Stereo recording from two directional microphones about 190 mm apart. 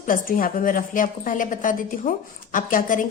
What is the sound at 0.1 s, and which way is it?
A woman's voice, 45° left (ahead or behind).